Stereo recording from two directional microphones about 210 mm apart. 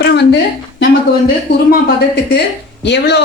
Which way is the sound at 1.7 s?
50° left (ahead or behind).